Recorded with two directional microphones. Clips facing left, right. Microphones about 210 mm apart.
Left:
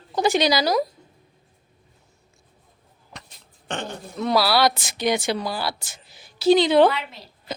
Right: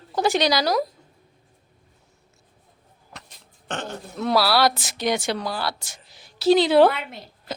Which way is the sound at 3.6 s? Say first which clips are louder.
Left 1 dB; centre (ahead or behind).